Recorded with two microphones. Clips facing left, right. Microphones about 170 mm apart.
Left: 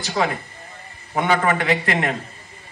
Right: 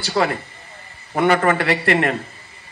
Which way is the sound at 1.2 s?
65° right (ahead or behind).